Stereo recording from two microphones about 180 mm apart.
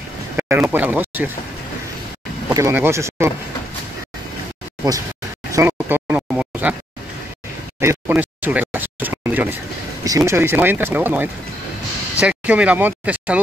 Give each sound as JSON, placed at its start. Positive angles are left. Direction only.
{"t": 0.4, "sound": "speech", "side_deg": -5}
{"t": 2.5, "sound": "speech", "side_deg": -15}
{"t": 5.5, "sound": "a sound", "side_deg": -15}
{"t": 7.8, "sound": "speech", "side_deg": -15}